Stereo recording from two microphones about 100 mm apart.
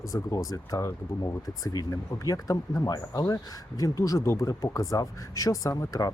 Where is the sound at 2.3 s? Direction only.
35° left (ahead or behind).